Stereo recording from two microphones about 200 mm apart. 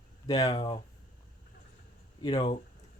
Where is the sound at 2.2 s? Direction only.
25° left (ahead or behind).